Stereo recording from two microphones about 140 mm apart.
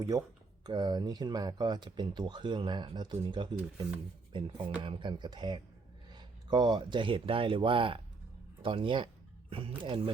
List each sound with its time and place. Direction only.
0.0 s speech: 25° right (ahead or behind)